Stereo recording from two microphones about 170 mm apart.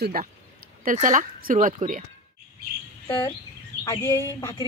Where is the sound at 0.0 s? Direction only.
60° right (ahead or behind).